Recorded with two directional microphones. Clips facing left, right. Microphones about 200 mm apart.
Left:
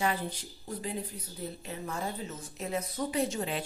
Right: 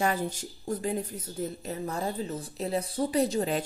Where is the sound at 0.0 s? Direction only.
45° right (ahead or behind).